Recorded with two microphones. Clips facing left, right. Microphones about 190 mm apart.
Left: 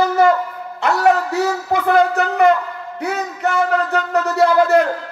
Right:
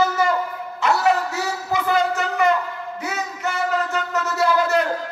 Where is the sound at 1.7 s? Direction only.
55° left (ahead or behind).